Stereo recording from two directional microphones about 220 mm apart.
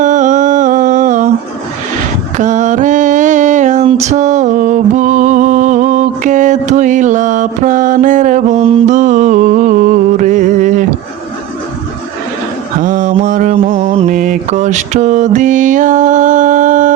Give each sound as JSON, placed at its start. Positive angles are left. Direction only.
{"t": 0.0, "sound": "a sound", "side_deg": -35}
{"t": 2.4, "sound": "mantra", "side_deg": -35}
{"t": 12.8, "sound": "mantra", "side_deg": -35}
{"t": 13.7, "sound": "mantra", "side_deg": -25}